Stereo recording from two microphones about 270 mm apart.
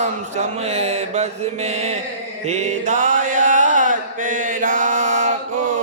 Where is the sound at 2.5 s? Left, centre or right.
Right.